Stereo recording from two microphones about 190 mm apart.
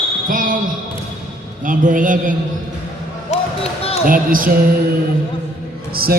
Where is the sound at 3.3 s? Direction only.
35° left (ahead or behind).